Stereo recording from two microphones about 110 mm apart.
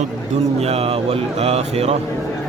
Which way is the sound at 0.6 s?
70° right (ahead or behind).